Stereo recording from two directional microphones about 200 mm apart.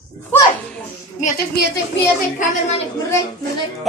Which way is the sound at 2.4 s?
35° left (ahead or behind).